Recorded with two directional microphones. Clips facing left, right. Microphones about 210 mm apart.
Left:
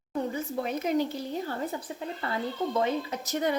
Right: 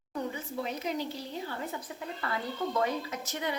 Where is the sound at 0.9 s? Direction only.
50° left (ahead or behind).